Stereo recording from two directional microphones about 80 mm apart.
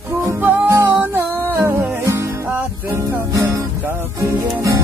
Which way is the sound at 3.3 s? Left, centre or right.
Right.